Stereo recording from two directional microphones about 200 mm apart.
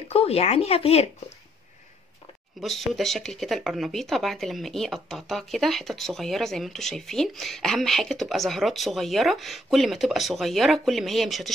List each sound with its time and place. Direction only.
0.1 s speech: 30° left (ahead or behind)
2.6 s speech: centre (ahead or behind)